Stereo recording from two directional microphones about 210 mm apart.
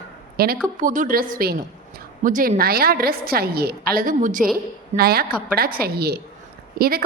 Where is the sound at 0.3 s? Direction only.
45° right (ahead or behind).